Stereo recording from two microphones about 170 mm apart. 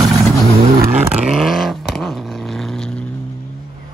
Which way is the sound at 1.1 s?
Centre (ahead or behind).